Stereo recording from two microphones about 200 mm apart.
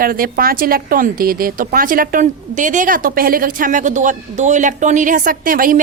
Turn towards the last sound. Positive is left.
turn(degrees=-45)  # may be behind; listen again after turning